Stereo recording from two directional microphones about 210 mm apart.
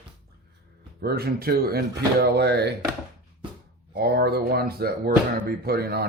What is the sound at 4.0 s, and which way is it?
Speech, 50° right (ahead or behind).